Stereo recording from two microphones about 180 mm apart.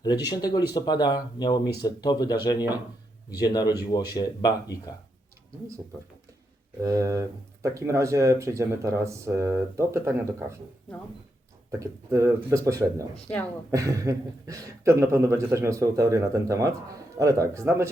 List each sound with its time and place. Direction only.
0.0 s speech: 20° left (ahead or behind)
6.8 s speech: 20° right (ahead or behind)
11.7 s speech: 15° right (ahead or behind)